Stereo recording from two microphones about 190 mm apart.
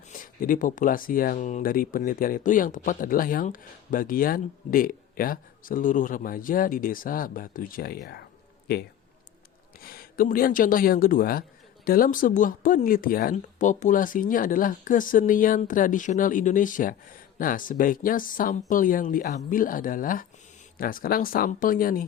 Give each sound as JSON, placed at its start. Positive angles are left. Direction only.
{"t": 0.1, "sound": "speech", "side_deg": 45}